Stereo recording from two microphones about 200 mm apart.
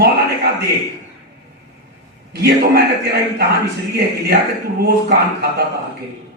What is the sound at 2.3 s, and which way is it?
A man's voice, 55° right (ahead or behind).